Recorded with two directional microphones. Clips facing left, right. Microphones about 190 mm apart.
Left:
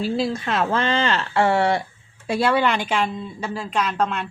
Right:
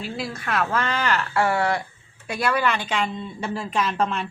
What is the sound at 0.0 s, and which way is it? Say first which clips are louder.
Speech: left 8 dB; 25° left (ahead or behind).